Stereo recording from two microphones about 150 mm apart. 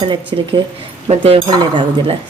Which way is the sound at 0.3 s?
30° right (ahead or behind).